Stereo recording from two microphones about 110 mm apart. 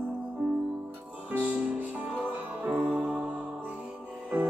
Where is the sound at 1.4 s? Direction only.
10° right (ahead or behind).